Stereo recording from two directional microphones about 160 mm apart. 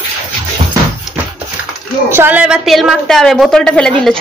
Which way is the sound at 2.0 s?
15° right (ahead or behind).